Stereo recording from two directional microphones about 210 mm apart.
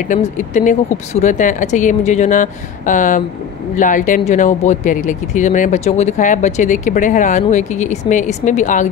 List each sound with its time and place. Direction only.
0.1 s speech: 35° left (ahead or behind)